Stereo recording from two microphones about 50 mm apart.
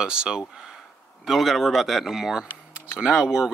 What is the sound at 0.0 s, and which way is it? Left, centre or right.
Speech, centre.